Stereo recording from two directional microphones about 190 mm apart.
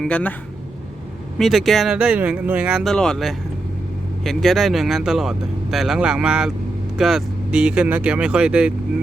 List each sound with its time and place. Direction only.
0.0 s speech: 5° left (ahead or behind)
1.4 s speech: centre (ahead or behind)